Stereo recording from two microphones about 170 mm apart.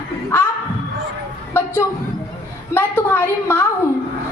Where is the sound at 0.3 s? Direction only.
15° left (ahead or behind).